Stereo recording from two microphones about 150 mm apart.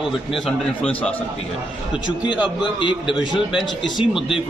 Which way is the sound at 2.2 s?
30° left (ahead or behind).